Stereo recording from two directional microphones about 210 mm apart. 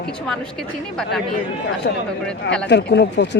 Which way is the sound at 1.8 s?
50° left (ahead or behind).